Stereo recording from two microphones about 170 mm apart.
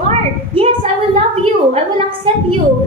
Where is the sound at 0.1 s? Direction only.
35° right (ahead or behind).